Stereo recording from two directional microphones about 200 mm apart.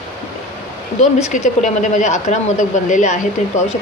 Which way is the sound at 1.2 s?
40° left (ahead or behind).